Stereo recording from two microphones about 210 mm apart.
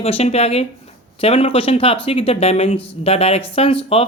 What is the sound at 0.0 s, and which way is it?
Speech, 30° left (ahead or behind).